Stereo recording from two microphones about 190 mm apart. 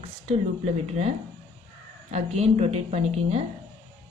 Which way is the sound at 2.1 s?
35° right (ahead or behind).